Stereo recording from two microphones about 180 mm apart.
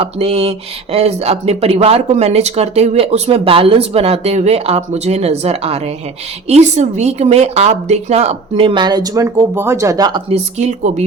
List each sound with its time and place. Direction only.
0.0 s speech: 35° right (ahead or behind)